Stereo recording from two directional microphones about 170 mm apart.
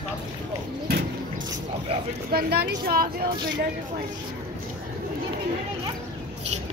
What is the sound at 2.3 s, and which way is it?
Speech, 65° right (ahead or behind).